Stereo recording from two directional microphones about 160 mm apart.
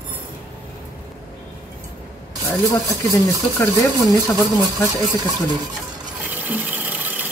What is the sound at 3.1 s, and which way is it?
Speech, 20° left (ahead or behind).